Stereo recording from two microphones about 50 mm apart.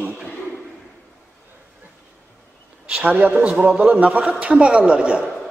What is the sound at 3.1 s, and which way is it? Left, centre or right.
A man's voice, right.